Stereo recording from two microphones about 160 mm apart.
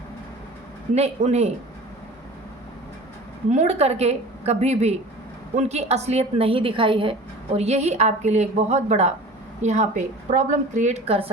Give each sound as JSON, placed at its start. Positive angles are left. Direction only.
{"t": 0.9, "sound": "a woman's voice", "side_deg": -40}
{"t": 3.5, "sound": "a woman's voice", "side_deg": -45}